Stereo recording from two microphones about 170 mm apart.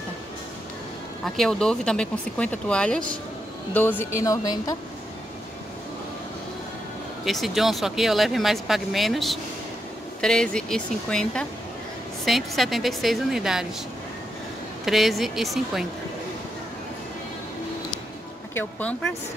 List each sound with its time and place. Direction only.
1.2 s speech: centre (ahead or behind)
4.0 s speech: 15° left (ahead or behind)
7.2 s speech: centre (ahead or behind)
14.9 s speech: centre (ahead or behind)
18.5 s speech: 10° left (ahead or behind)